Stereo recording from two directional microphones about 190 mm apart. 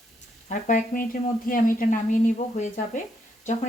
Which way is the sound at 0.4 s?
40° left (ahead or behind).